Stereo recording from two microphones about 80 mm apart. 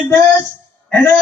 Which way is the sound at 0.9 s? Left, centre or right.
Left.